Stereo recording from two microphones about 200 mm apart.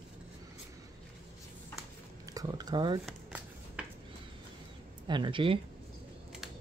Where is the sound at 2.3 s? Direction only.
20° right (ahead or behind).